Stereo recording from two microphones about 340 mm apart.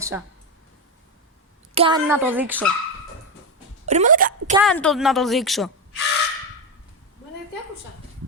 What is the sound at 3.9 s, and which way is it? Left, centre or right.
Speech, right.